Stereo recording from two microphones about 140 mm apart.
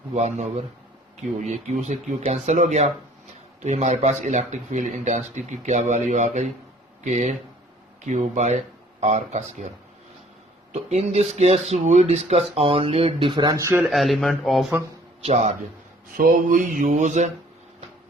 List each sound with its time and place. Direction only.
0.1 s speech: 55° right (ahead or behind); by 13.8 s 20° right (ahead or behind)
13.9 s speech: centre (ahead or behind)
15.2 s speech: 50° right (ahead or behind)
16.1 s mantra: 75° right (ahead or behind); by 17.3 s 60° right (ahead or behind)